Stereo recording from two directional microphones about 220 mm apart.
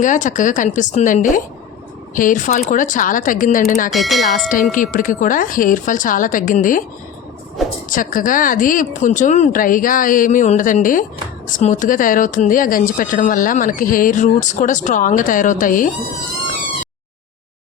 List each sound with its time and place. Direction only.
0.0 s speech: 35° left (ahead or behind)
3.9 s speech: centre (ahead or behind)
4.7 s speech: 40° left (ahead or behind)
7.9 s speech: 35° left (ahead or behind)